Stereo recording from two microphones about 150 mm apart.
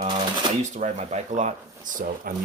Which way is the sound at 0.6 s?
55° right (ahead or behind).